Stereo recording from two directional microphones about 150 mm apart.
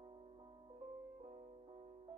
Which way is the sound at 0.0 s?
35° right (ahead or behind).